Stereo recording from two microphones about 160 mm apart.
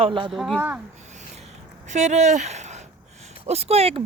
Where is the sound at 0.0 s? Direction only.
30° right (ahead or behind).